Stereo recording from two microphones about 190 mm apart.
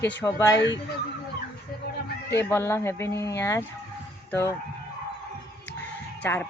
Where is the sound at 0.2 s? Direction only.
15° left (ahead or behind).